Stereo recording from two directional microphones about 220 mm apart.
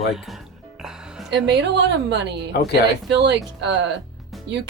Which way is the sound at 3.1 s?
50° right (ahead or behind).